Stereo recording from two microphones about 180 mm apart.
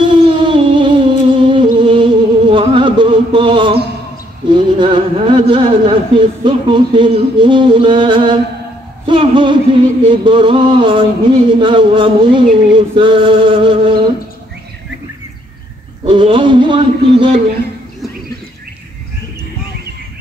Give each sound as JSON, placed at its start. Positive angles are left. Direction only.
{"t": 0.0, "sound": "music", "side_deg": -25}
{"t": 4.5, "sound": "a man's voice", "side_deg": -25}
{"t": 16.1, "sound": "a man's voice", "side_deg": -25}